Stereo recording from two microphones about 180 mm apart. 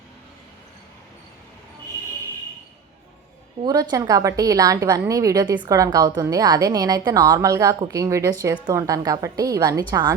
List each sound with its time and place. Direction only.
3.6 s a woman's voice: 20° right (ahead or behind)